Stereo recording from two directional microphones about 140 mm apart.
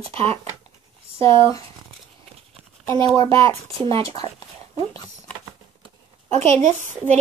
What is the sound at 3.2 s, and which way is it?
Child singing, 20° left (ahead or behind).